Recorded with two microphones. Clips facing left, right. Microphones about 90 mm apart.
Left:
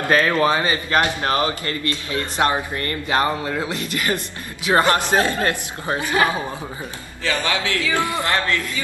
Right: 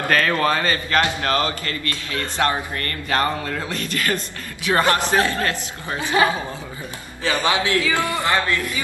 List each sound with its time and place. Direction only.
0.1 s a man's voice: 15° left (ahead or behind)
5.9 s a man's voice: 20° right (ahead or behind)
7.2 s a man's voice: 20° right (ahead or behind)